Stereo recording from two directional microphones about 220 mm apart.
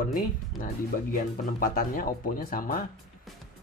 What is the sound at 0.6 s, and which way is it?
Speech, 40° left (ahead or behind).